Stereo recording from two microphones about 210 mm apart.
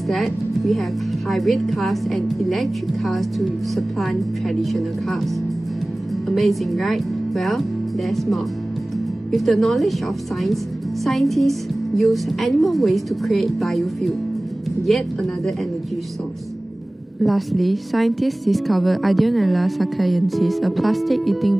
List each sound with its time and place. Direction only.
0.1 s a woman's voice: centre (ahead or behind)
11.1 s a woman's voice: centre (ahead or behind)
17.2 s a woman's voice: centre (ahead or behind)